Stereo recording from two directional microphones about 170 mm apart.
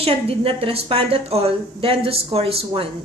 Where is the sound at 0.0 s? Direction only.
35° right (ahead or behind).